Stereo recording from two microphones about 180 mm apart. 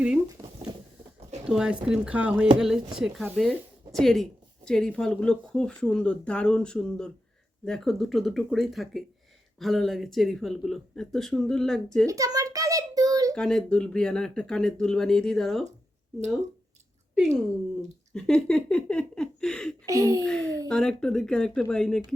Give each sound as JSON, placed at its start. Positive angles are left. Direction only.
{"t": 1.5, "sound": "speech", "side_deg": -5}
{"t": 12.0, "sound": "a sound", "side_deg": -20}
{"t": 13.3, "sound": "speech", "side_deg": 5}
{"t": 18.1, "sound": "speech", "side_deg": 5}
{"t": 19.8, "sound": "speech", "side_deg": -20}
{"t": 20.2, "sound": "speech", "side_deg": 5}